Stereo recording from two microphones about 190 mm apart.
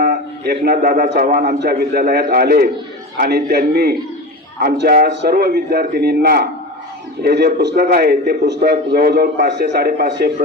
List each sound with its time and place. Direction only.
0.0 s a man's voice: 50° right (ahead or behind)